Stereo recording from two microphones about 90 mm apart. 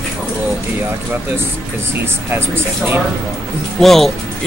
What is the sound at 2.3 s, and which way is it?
Speech, 25° right (ahead or behind).